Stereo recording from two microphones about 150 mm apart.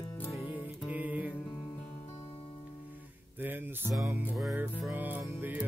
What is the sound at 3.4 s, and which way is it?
Music, 15° right (ahead or behind).